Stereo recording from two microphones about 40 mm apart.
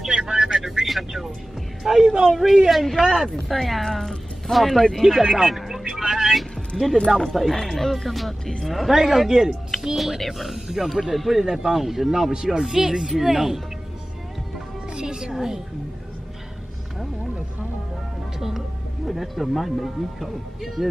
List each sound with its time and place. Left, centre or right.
0.2 s vehicle: right
0.6 s vehicle: centre
1.8 s speech: centre
5.2 s speech: centre
5.5 s music: centre
7.2 s speech: centre
9.9 s speech: centre
10.5 s speech: centre
11.1 s speech: centre
15.0 s music: centre
15.3 s speech: centre
19.0 s speech: centre